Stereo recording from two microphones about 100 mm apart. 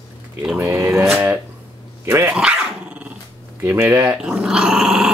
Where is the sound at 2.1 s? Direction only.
25° right (ahead or behind).